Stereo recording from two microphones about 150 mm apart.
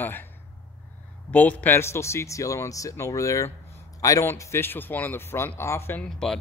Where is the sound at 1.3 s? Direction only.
10° left (ahead or behind).